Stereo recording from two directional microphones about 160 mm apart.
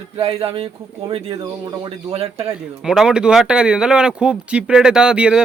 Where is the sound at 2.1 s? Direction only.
40° right (ahead or behind).